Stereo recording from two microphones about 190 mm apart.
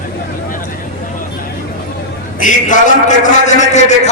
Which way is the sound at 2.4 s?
40° left (ahead or behind).